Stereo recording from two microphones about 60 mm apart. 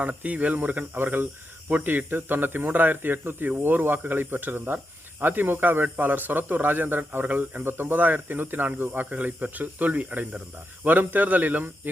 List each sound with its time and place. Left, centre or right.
0.0 s speech: right